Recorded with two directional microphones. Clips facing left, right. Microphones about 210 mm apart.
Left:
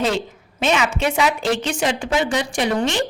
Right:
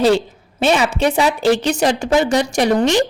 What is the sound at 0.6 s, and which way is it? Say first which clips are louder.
A woman's voice: right 4 dB; 35° right (ahead or behind).